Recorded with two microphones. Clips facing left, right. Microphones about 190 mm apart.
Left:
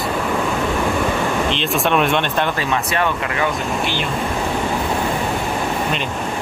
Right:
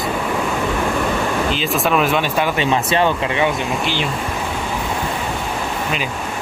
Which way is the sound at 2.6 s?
25° right (ahead or behind).